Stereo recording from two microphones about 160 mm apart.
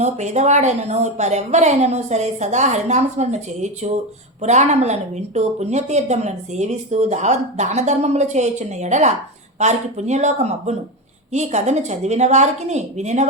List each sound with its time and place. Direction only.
0.0 s a woman's voice: 45° right (ahead or behind)